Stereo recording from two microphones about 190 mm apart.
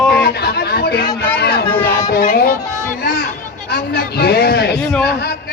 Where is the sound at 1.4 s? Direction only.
60° left (ahead or behind).